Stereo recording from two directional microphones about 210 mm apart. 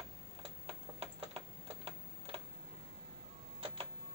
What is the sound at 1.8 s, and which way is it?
Typing, 25° right (ahead or behind).